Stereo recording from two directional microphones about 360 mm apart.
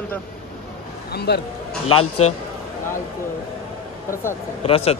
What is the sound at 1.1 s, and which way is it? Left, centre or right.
Speech, left.